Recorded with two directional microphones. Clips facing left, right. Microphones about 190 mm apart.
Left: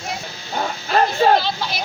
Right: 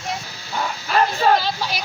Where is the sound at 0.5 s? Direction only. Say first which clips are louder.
Left 1 dB; 40° left (ahead or behind).